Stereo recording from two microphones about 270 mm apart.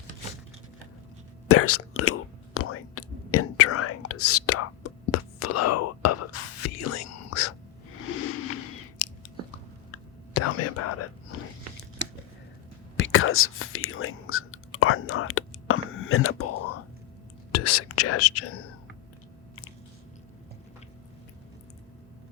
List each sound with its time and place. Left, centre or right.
1.5 s whispering: left
8.1 s a sound: left
9.9 s whispering: left
13.0 s whispering: left
17.5 s whispering: left